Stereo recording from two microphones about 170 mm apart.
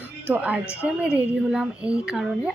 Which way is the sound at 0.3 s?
10° right (ahead or behind).